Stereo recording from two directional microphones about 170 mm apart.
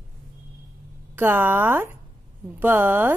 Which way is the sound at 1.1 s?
10° right (ahead or behind).